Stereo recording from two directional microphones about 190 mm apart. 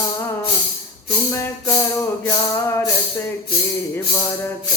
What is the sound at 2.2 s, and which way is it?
Music, 10° left (ahead or behind).